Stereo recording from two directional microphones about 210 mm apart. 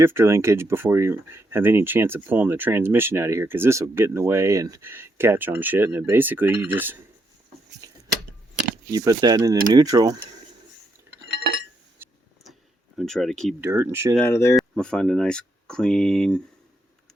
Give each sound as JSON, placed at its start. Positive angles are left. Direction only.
{"t": 0.0, "sound": "speech", "side_deg": -10}
{"t": 8.9, "sound": "speech", "side_deg": -20}
{"t": 11.1, "sound": "chink", "side_deg": -10}
{"t": 12.0, "sound": "vehicle", "side_deg": -10}
{"t": 13.0, "sound": "speech", "side_deg": 0}
{"t": 13.6, "sound": "speech", "side_deg": -10}
{"t": 14.2, "sound": "speech", "side_deg": 15}